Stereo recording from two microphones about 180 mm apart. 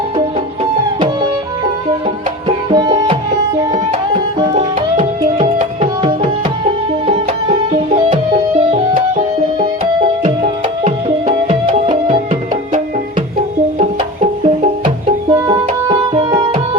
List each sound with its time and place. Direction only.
0.9 s music: 25° right (ahead or behind)
2.6 s music: 25° right (ahead or behind)
4.5 s tabla: 35° right (ahead or behind)
7.7 s music: 30° right (ahead or behind)
10.4 s music: 35° right (ahead or behind)
11.9 s music: 25° right (ahead or behind)
14.4 s music: 40° right (ahead or behind)
15.3 s music: 20° right (ahead or behind)